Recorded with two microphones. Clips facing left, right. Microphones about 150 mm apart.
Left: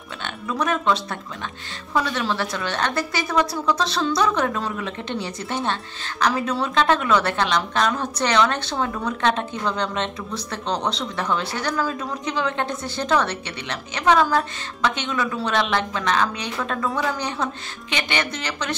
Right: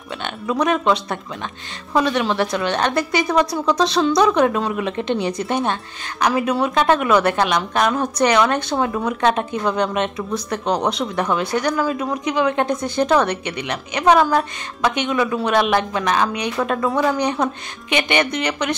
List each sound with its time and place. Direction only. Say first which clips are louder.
0.2 s a woman's voice: right 5 dB; 20° right (ahead or behind)
2.0 s a woman's voice: right 5 dB; 20° right (ahead or behind)